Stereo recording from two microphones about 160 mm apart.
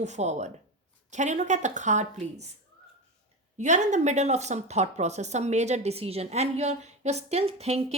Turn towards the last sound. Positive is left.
turn(degrees=-40)  # may be behind; listen again after turning